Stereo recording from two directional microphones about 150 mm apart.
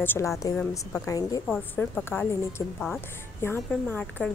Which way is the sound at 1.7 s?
10° left (ahead or behind).